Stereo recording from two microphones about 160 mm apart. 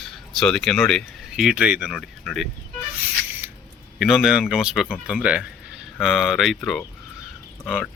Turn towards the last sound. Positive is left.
turn(degrees=-5)  # may be behind; listen again after turning